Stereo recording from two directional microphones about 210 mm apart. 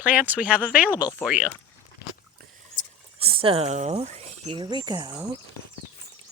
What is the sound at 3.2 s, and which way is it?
Speech, 25° right (ahead or behind).